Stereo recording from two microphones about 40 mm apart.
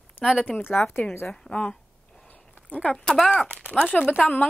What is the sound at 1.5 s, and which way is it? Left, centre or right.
Speech, left.